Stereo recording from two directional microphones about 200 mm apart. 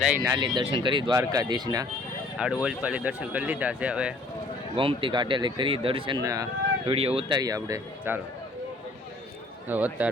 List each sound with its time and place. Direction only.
0.2 s speech: 20° right (ahead or behind)
2.4 s speech: 5° right (ahead or behind)
4.8 s speech: 25° right (ahead or behind)
6.2 s speech: 15° right (ahead or behind)
6.8 s speech: 30° right (ahead or behind); by 8.2 s 15° right (ahead or behind)
9.6 s speech: 10° right (ahead or behind)